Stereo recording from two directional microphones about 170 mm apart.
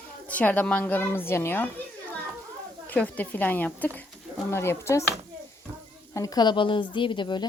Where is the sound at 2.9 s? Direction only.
10° left (ahead or behind).